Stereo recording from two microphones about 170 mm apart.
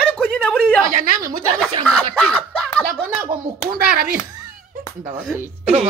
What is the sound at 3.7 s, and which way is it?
Speech, 60° right (ahead or behind).